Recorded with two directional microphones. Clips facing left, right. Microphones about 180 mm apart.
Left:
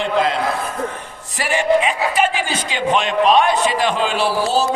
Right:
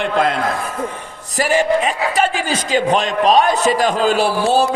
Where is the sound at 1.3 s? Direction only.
40° right (ahead or behind).